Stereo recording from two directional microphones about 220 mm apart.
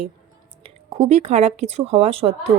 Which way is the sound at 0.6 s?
30° right (ahead or behind).